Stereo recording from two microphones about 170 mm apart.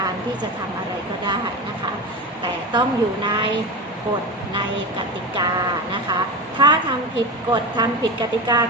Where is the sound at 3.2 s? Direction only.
30° right (ahead or behind).